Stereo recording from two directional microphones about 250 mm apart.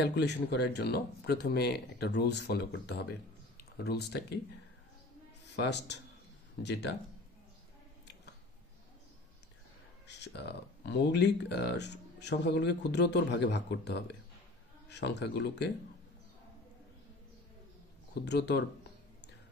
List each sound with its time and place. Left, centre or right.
0.0 s speech: left
5.6 s speech: left
10.0 s speech: left
18.2 s speech: left